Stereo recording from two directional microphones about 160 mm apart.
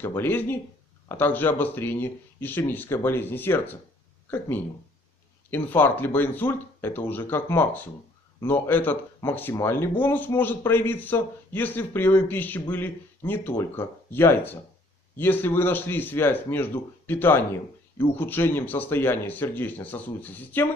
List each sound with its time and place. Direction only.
0.0 s speech: 15° left (ahead or behind)